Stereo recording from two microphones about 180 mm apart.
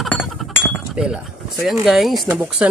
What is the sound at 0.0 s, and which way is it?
Speech, centre (ahead or behind).